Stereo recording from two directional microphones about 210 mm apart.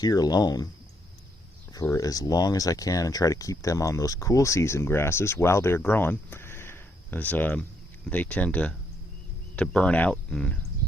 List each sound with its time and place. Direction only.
0.0 s speech: 20° left (ahead or behind)
1.7 s speech: 15° left (ahead or behind)